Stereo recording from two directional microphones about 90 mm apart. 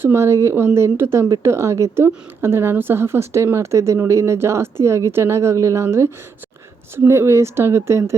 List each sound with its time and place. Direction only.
0.0 s speech: 30° right (ahead or behind)